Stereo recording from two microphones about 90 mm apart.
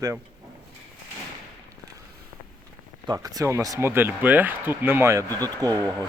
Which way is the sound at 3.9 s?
25° right (ahead or behind).